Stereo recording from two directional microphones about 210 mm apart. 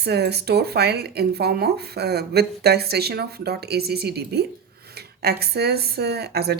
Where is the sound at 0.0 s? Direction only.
50° right (ahead or behind).